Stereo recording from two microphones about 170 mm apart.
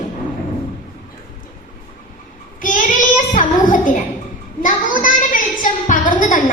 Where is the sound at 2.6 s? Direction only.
50° left (ahead or behind).